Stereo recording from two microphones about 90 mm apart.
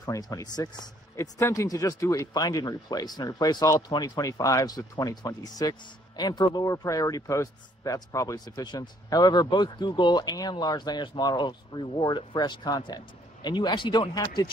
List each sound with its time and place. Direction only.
0.1 s speech: 40° left (ahead or behind)